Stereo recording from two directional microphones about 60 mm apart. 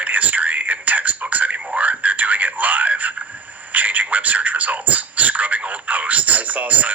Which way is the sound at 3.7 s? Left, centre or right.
Right.